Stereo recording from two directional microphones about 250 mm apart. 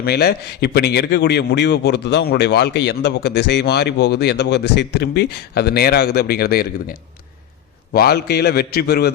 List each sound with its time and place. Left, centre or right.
0.0 s a man's voice: left
7.9 s a man's voice: left